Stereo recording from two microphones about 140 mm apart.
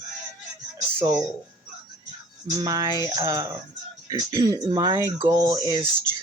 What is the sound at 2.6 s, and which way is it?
Speech, 25° right (ahead or behind).